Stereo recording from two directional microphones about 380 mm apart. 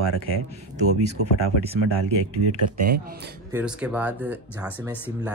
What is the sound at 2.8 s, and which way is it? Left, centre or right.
Speech, right.